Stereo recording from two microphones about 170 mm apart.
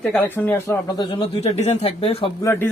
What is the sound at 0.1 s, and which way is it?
Speech, 10° left (ahead or behind).